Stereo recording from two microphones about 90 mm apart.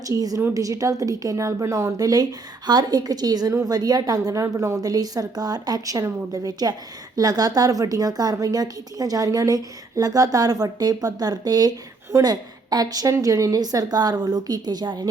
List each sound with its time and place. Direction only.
0.1 s a woman's voice: 40° right (ahead or behind)